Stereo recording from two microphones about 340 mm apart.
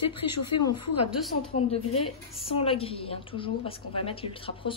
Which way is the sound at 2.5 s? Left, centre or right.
Centre.